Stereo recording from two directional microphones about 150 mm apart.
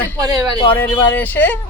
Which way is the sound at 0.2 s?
25° right (ahead or behind).